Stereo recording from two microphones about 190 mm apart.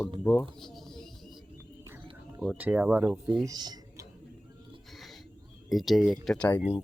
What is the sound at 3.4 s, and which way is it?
Typing, 20° right (ahead or behind).